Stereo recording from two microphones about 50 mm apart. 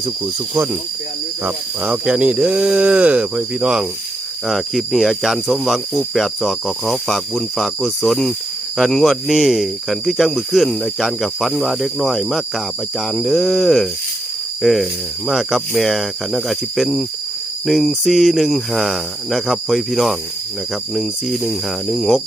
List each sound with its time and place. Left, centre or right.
2.0 s cricket: centre
4.4 s speech: centre